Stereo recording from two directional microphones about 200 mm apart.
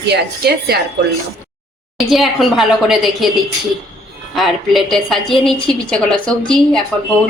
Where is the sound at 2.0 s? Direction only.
Centre (ahead or behind).